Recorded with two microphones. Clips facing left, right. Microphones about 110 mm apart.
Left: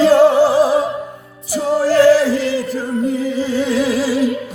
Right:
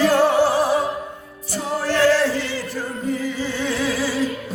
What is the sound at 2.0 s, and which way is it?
Music, 10° left (ahead or behind).